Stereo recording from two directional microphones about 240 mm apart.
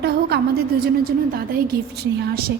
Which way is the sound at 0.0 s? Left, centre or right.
Right.